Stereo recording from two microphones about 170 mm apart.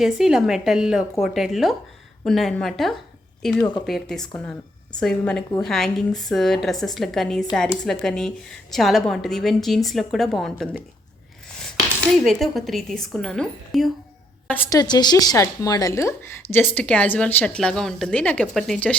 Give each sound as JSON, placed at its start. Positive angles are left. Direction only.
{"t": 0.0, "sound": "a woman's voice", "side_deg": 0}
{"t": 11.4, "sound": "coin", "side_deg": 5}
{"t": 12.1, "sound": "a woman's voice", "side_deg": 0}
{"t": 14.7, "sound": "a woman's voice", "side_deg": 20}